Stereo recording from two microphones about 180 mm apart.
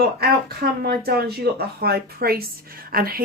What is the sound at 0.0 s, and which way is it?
A woman's voice, 60° right (ahead or behind).